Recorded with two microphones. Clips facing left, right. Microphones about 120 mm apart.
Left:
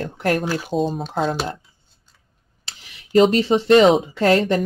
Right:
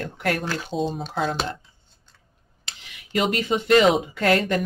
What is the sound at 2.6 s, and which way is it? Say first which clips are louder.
Speech: even; 30° left (ahead or behind).